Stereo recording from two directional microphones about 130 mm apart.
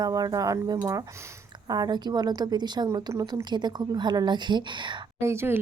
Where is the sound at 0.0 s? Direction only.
30° right (ahead or behind).